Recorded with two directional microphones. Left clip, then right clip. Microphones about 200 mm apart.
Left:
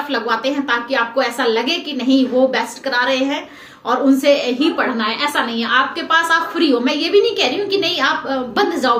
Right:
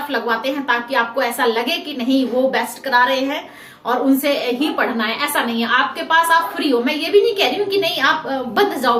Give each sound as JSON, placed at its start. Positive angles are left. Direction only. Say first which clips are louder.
{"t": 0.1, "sound": "a woman's voice", "louder": "left 1 dB", "side_deg": 10}